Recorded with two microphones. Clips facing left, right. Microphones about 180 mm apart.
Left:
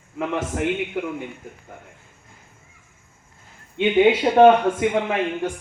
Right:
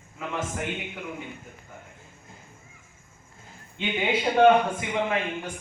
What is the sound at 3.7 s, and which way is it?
Speech, 70° left (ahead or behind).